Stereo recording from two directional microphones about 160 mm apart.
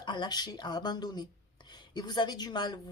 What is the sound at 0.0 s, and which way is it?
Speech, 30° left (ahead or behind).